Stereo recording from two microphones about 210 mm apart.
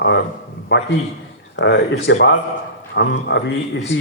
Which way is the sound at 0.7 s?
55° left (ahead or behind).